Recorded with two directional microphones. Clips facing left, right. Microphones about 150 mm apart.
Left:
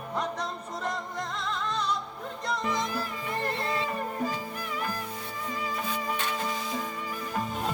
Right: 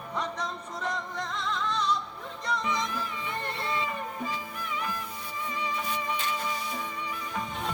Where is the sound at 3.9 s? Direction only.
40° left (ahead or behind).